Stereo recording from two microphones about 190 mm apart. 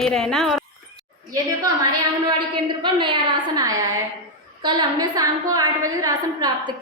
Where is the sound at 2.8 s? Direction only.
25° right (ahead or behind).